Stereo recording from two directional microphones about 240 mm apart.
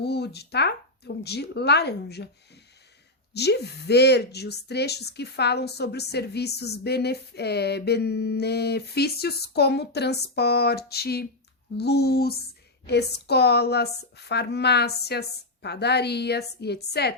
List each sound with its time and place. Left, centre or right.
0.0 s speech: left
3.3 s speech: left